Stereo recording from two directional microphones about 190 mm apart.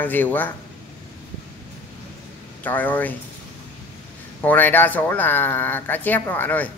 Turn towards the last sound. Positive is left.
turn(degrees=10)  # may be behind; listen again after turning